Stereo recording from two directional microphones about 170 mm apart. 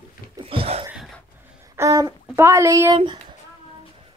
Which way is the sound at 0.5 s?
35° right (ahead or behind).